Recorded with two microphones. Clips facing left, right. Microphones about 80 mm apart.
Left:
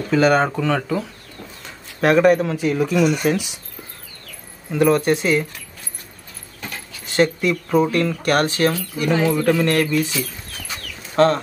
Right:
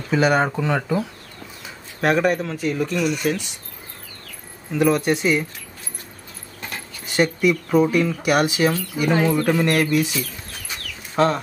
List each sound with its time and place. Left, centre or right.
0.1 s speech: centre
1.6 s speech: centre
4.7 s speech: centre
7.2 s speech: centre